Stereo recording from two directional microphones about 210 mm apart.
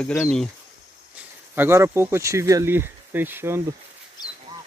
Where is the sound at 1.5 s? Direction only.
10° right (ahead or behind).